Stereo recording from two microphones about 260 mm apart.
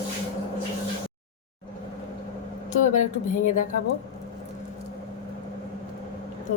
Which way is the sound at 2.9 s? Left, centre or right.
Left.